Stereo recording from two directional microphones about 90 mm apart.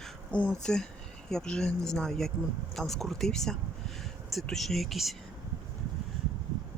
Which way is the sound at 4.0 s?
Centre (ahead or behind).